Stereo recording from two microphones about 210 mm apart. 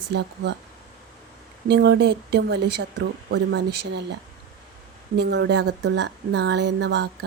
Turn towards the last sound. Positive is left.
turn(degrees=-55)  # may be behind; listen again after turning